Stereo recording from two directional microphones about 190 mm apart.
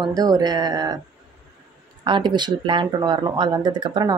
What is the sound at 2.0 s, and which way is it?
A woman's voice, 25° right (ahead or behind).